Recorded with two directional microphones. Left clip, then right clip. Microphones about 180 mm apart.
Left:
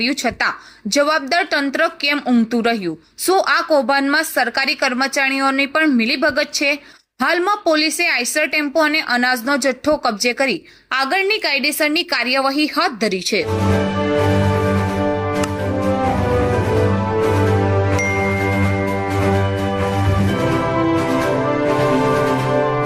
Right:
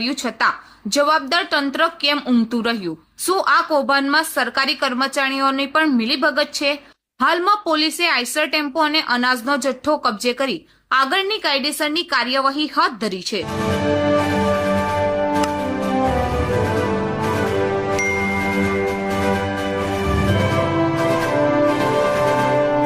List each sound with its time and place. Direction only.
0.9 s a woman's voice: 15° left (ahead or behind)